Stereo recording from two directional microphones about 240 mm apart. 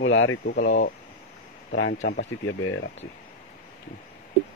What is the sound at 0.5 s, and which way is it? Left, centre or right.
Speech, left.